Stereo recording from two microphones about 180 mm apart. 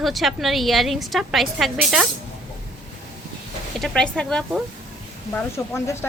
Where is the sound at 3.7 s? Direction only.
5° left (ahead or behind).